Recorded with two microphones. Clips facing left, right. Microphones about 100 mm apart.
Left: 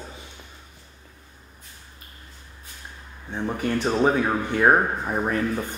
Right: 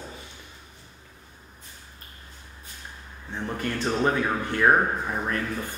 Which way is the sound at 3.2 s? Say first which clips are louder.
Left 4 dB; 15° left (ahead or behind).